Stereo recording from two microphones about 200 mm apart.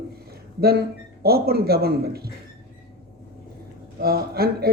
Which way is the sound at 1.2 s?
50° right (ahead or behind).